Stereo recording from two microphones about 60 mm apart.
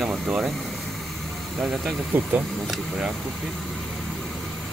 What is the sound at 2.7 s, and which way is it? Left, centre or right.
Speech, centre.